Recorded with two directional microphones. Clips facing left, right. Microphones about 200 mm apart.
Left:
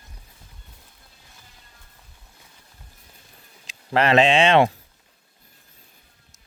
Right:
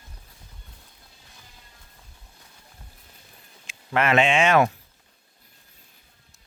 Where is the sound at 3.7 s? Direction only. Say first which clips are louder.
Left 3 dB; 35° left (ahead or behind).